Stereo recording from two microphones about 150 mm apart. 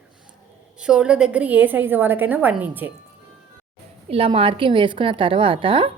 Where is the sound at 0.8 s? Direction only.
5° right (ahead or behind).